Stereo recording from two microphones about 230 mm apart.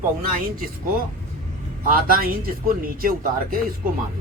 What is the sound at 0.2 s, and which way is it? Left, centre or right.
Speech, right.